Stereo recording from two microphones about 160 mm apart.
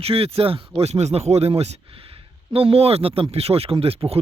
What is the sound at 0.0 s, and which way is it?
Speech, 40° right (ahead or behind).